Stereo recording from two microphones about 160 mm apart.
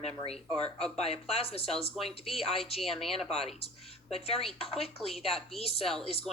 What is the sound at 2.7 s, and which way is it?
Speech, centre (ahead or behind).